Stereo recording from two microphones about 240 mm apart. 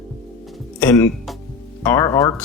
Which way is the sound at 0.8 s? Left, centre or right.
Centre.